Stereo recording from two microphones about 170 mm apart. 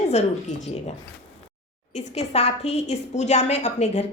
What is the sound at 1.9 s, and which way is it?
A woman's voice, 40° left (ahead or behind).